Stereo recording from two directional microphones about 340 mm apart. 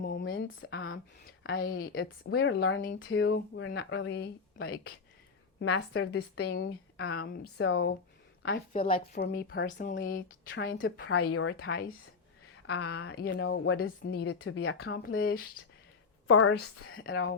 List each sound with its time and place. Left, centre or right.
0.0 s a sound: left
1.5 s a woman's voice: left
13.1 s a woman's voice: left